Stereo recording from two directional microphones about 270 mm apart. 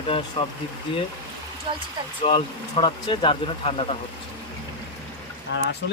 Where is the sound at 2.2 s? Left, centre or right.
Centre.